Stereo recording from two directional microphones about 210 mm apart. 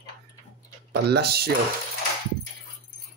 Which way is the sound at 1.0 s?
50° right (ahead or behind).